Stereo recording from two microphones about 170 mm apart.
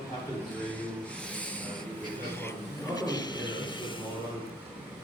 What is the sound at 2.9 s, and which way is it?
A man's voice, 25° left (ahead or behind).